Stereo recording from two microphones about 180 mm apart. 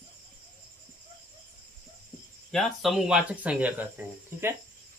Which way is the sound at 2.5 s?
Centre (ahead or behind).